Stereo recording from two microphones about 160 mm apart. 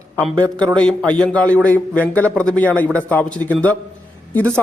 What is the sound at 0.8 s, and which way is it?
Speech, 5° left (ahead or behind).